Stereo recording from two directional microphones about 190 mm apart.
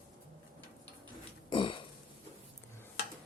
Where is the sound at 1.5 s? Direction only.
25° left (ahead or behind).